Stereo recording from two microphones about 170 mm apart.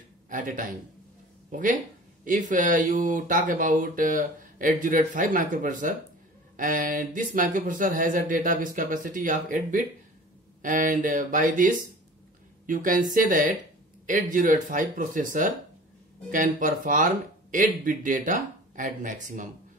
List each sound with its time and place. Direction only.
0.3 s speech: 50° right (ahead or behind)